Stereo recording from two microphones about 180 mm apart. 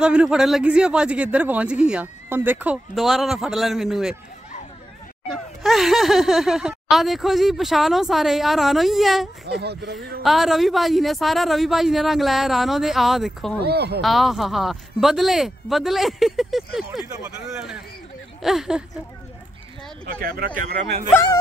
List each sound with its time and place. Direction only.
0.0 s a man's voice: 5° right (ahead or behind)
5.3 s speech: centre (ahead or behind)
9.6 s speech: 65° right (ahead or behind)
10.2 s speech: centre (ahead or behind)
13.6 s speech: 65° right (ahead or behind)
14.0 s speech: centre (ahead or behind)
20.2 s speech: 55° right (ahead or behind)
21.1 s speech: 15° left (ahead or behind)